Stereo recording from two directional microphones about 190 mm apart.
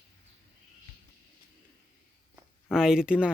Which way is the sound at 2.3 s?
5° right (ahead or behind).